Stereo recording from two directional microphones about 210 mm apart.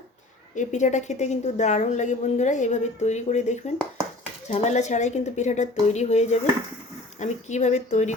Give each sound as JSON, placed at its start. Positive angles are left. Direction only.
{"t": 0.5, "sound": "a woman's voice", "side_deg": 35}